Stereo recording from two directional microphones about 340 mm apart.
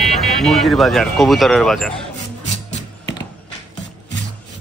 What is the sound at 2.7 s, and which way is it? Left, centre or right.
Music, left.